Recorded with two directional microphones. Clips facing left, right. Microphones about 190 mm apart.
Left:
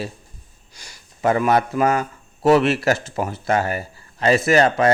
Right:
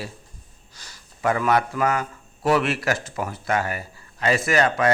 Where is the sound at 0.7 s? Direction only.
15° left (ahead or behind).